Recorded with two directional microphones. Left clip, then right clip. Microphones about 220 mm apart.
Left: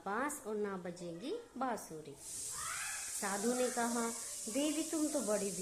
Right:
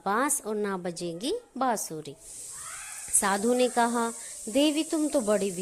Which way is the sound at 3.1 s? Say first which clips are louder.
Right 12 dB; 40° right (ahead or behind).